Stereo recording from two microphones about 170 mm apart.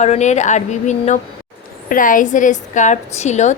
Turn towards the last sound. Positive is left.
turn(degrees=45)  # may be behind; listen again after turning